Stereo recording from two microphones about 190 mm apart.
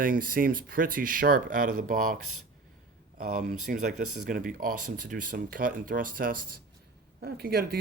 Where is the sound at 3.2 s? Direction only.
50° right (ahead or behind).